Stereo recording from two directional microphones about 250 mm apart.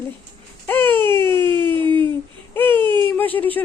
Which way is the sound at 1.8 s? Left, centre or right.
Centre.